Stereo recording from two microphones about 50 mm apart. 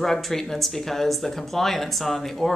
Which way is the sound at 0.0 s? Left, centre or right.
Centre.